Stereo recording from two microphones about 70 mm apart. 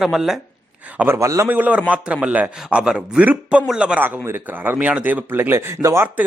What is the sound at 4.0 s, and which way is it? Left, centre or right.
A man's voice, right.